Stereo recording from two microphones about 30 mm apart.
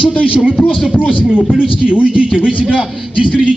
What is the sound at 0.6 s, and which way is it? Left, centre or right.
Speech, centre.